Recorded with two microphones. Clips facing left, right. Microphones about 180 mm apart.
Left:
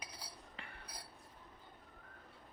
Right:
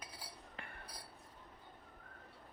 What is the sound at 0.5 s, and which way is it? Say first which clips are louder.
Chink: right 2 dB; 50° right (ahead or behind).